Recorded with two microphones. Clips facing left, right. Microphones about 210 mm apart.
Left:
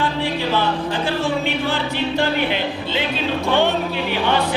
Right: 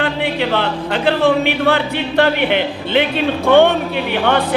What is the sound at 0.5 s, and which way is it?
Speech, 65° right (ahead or behind).